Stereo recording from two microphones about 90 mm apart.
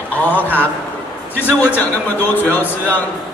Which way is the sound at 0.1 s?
20° left (ahead or behind).